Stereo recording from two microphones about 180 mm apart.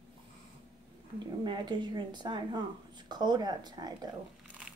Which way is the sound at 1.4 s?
25° right (ahead or behind).